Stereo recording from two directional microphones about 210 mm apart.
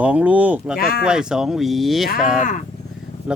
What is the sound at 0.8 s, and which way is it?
Speech, 45° left (ahead or behind).